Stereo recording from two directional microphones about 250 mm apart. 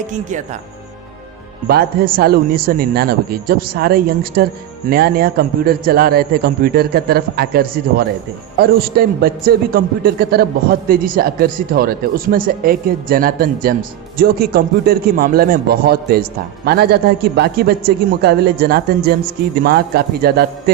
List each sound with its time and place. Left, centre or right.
0.1 s speech: right
1.6 s a man's voice: right